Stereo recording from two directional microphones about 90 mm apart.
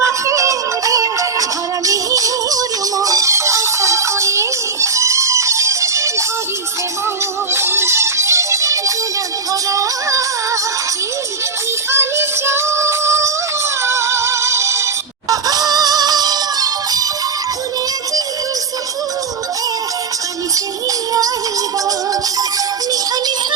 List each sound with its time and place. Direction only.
0.0 s music: 35° right (ahead or behind)
7.5 s music: 30° right (ahead or behind)
11.9 s music: 30° right (ahead or behind)
15.3 s music: 45° right (ahead or behind)